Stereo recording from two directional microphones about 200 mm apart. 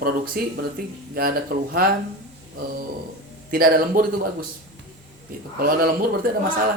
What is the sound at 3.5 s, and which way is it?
Speech, 45° right (ahead or behind).